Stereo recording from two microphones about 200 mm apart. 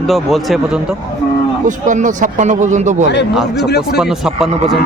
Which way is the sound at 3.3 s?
Centre (ahead or behind).